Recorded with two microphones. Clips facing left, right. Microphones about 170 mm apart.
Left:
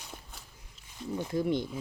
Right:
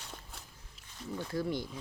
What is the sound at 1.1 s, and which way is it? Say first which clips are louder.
Speech: left 5 dB; 20° left (ahead or behind).